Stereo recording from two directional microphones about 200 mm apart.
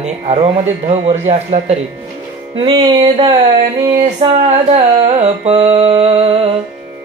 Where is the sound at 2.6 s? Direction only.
25° right (ahead or behind).